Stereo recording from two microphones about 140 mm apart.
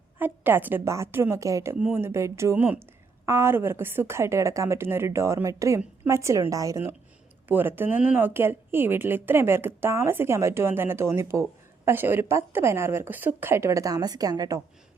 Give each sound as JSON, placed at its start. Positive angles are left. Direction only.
{"t": 0.2, "sound": "a woman's voice", "side_deg": -15}